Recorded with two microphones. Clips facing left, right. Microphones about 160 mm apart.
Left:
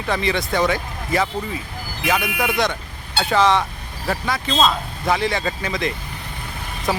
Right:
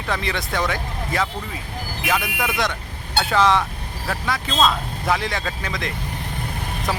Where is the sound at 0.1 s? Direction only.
Centre (ahead or behind).